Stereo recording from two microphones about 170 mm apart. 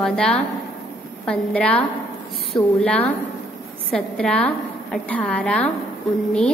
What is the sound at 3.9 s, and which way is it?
A woman's voice, 5° left (ahead or behind).